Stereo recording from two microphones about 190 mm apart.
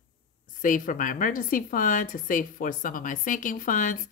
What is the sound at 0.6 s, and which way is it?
A woman's voice, 45° left (ahead or behind).